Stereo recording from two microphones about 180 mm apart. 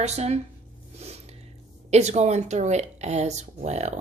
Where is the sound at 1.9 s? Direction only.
40° right (ahead or behind).